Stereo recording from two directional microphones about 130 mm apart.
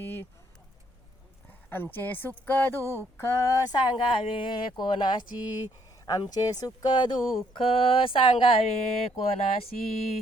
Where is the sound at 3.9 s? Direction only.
40° left (ahead or behind).